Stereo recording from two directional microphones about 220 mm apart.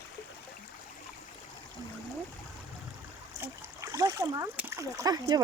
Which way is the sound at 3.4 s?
15° right (ahead or behind).